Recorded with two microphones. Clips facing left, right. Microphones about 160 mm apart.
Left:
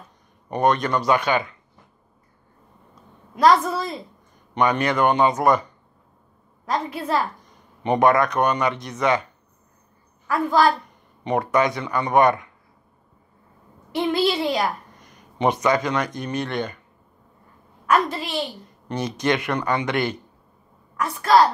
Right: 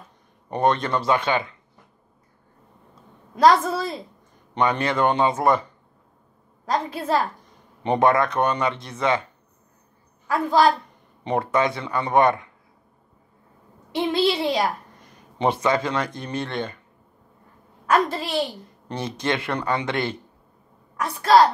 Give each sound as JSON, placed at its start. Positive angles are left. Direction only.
{"t": 0.5, "sound": "speech", "side_deg": -25}
{"t": 3.4, "sound": "a woman's voice", "side_deg": -25}
{"t": 13.9, "sound": "a woman's voice", "side_deg": -20}
{"t": 18.1, "sound": "a woman's voice", "side_deg": -35}